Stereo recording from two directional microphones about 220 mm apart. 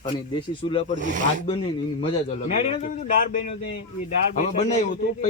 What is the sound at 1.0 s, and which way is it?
Speech, 35° right (ahead or behind).